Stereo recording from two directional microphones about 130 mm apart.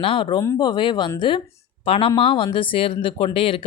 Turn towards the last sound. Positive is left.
turn(degrees=45)  # may be behind; listen again after turning